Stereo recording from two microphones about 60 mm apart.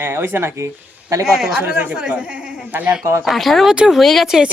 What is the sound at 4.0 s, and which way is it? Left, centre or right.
Speech, centre.